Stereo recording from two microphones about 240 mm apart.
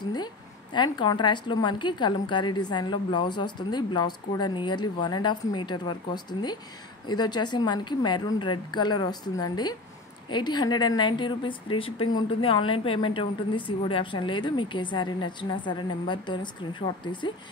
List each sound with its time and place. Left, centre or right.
0.7 s a woman's voice: centre